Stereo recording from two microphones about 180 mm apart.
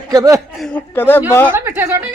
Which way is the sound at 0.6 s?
10° left (ahead or behind).